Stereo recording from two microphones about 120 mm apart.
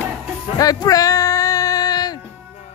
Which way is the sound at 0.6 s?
30° left (ahead or behind).